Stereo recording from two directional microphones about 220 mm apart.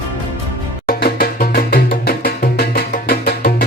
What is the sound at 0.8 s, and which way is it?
Music, 45° left (ahead or behind).